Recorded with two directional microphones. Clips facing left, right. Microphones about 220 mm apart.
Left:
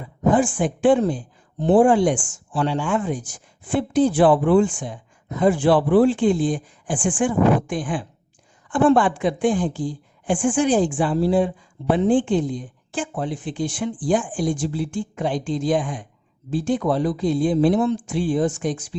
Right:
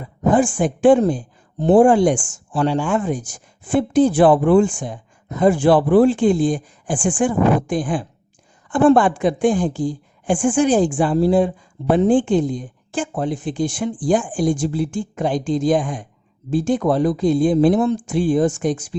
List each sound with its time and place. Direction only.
0.3 s speech: 45° right (ahead or behind)